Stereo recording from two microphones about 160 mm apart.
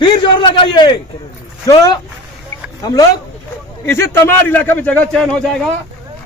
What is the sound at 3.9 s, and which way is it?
A man's voice, 15° left (ahead or behind).